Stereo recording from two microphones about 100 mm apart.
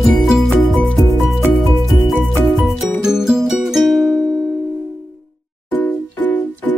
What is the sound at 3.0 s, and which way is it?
Music, 5° right (ahead or behind).